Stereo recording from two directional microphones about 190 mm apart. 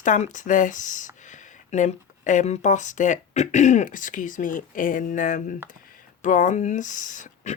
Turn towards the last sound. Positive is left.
turn(degrees=40)  # may be behind; listen again after turning